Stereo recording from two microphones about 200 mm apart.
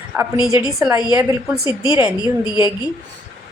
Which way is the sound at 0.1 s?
10° right (ahead or behind).